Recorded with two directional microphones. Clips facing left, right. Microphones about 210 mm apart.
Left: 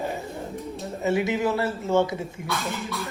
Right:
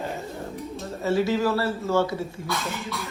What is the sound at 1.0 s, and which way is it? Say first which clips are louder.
A man's voice: right 1 dB; 20° left (ahead or behind).